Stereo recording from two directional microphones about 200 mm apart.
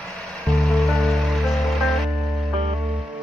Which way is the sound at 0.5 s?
Centre (ahead or behind).